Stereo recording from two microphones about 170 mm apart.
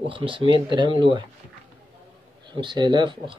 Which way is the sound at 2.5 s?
25° right (ahead or behind).